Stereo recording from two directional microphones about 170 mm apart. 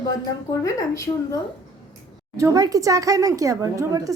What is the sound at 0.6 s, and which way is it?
Speech, 20° left (ahead or behind).